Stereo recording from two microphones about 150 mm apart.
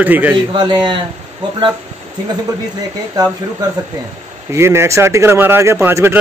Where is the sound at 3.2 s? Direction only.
25° right (ahead or behind).